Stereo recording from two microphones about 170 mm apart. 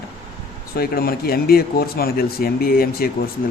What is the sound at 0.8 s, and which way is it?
Speech, 65° left (ahead or behind).